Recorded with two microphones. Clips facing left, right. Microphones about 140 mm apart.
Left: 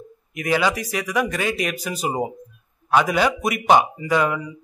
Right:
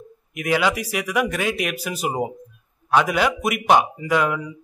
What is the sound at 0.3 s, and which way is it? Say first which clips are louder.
A man's voice: even; 5° right (ahead or behind).